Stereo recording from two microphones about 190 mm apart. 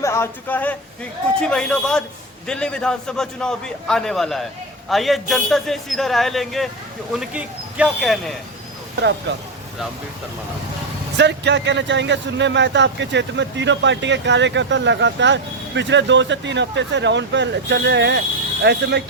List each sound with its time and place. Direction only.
0.0 s a man's voice: 15° left (ahead or behind)
11.2 s a man's voice: 65° right (ahead or behind)